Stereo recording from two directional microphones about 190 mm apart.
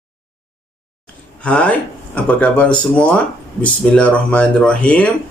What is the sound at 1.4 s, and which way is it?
A man's voice, 5° left (ahead or behind).